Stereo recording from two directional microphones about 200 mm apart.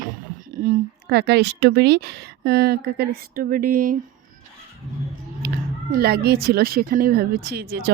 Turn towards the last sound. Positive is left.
turn(degrees=-50)  # may be behind; listen again after turning